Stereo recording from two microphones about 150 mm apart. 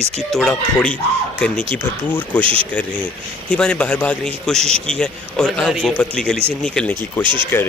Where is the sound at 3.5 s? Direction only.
5° left (ahead or behind).